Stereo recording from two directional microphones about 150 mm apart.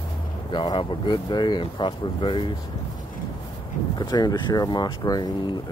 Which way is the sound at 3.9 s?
30° left (ahead or behind).